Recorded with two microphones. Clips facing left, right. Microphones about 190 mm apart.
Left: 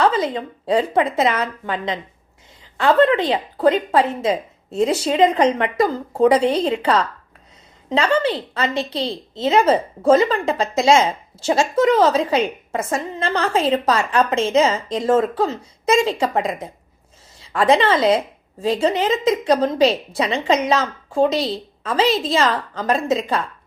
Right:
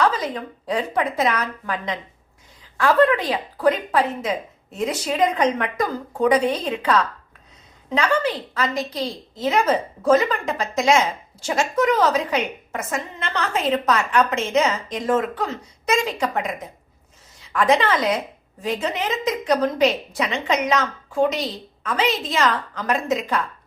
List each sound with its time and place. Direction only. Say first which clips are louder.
0.0 s a woman's voice: left 3 dB; 25° left (ahead or behind)